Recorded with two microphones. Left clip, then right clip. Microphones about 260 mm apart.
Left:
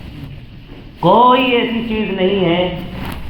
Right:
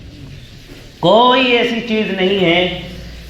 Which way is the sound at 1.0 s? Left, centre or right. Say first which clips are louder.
Even; right.